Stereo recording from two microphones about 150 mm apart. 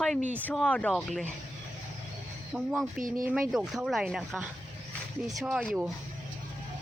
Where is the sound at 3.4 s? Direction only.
Centre (ahead or behind).